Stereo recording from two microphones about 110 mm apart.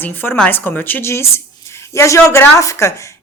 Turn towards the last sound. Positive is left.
turn(degrees=25)  # may be behind; listen again after turning